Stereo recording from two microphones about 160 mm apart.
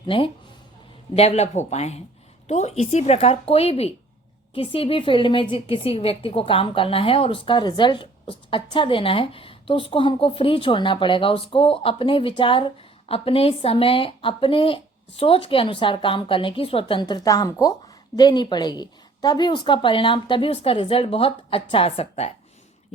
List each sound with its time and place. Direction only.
1.1 s a woman's voice: 40° left (ahead or behind)